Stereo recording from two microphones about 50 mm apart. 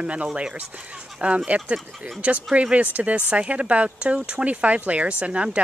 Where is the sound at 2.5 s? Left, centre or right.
Right.